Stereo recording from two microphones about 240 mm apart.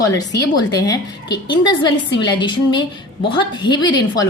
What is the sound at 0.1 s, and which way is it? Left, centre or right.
A woman's voice, centre.